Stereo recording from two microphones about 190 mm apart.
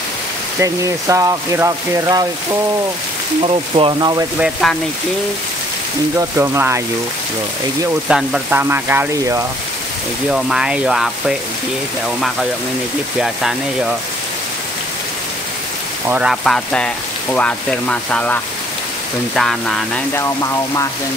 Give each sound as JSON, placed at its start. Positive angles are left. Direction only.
{"t": 0.6, "sound": "speech", "side_deg": -15}
{"t": 3.4, "sound": "speech", "side_deg": -25}
{"t": 4.4, "sound": "speech", "side_deg": 0}
{"t": 6.1, "sound": "speech", "side_deg": -15}
{"t": 8.1, "sound": "speech", "side_deg": -5}
{"t": 10.3, "sound": "speech", "side_deg": -5}
{"t": 13.2, "sound": "speech", "side_deg": 0}
{"t": 16.1, "sound": "speech", "side_deg": -5}